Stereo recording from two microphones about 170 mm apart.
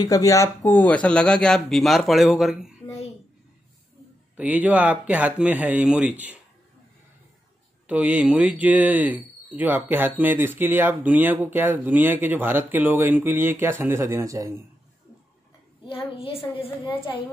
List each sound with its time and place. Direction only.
0.0 s speech: 20° left (ahead or behind); by 2.7 s centre (ahead or behind)
4.4 s speech: 10° right (ahead or behind)
7.8 s speech: 10° right (ahead or behind)
16.2 s a woman's voice: 35° left (ahead or behind)